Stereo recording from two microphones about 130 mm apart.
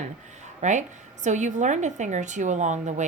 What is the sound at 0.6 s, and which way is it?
A woman's voice, 65° right (ahead or behind).